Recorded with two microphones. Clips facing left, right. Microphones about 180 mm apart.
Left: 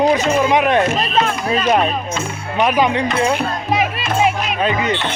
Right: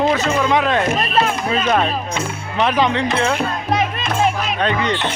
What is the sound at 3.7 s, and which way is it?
Music, 5° left (ahead or behind).